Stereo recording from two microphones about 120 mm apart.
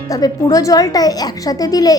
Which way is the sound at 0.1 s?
30° left (ahead or behind).